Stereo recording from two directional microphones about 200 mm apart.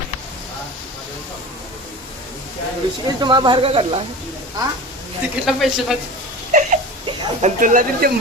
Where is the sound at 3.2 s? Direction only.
20° right (ahead or behind).